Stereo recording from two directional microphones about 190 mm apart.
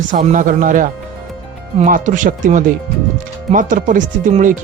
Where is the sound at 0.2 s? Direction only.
40° right (ahead or behind).